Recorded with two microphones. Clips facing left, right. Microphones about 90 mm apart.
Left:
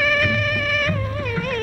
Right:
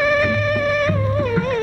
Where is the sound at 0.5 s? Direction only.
35° right (ahead or behind).